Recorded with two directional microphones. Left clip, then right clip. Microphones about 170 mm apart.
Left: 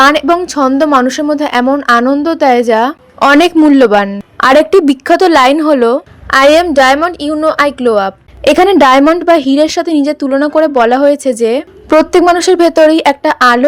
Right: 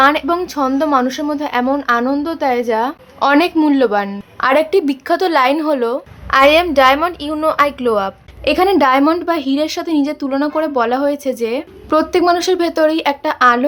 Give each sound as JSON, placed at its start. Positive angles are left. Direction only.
{"t": 0.0, "sound": "a woman's voice", "side_deg": 35}
{"t": 8.4, "sound": "a woman's voice", "side_deg": 45}